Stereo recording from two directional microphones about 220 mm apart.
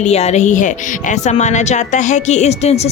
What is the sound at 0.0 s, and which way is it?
Speech, 30° left (ahead or behind).